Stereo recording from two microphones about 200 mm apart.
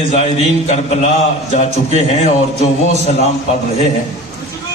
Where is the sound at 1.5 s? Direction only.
35° left (ahead or behind).